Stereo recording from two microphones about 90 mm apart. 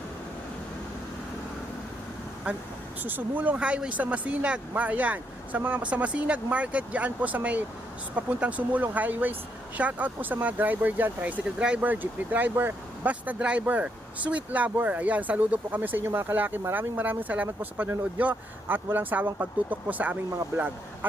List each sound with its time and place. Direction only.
3.0 s speech: 20° right (ahead or behind)